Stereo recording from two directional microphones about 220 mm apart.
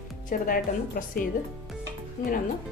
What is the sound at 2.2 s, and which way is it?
Speech, 35° left (ahead or behind).